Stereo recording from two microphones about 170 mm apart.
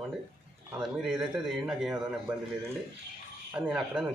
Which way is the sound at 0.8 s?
5° right (ahead or behind).